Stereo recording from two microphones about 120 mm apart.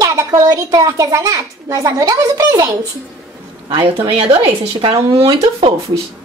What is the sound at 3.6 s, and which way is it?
Speech, 50° right (ahead or behind).